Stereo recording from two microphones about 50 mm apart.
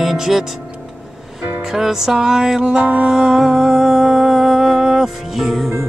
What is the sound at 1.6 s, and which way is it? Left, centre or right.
Music, centre.